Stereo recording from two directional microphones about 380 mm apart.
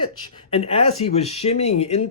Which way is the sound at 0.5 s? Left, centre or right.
Centre.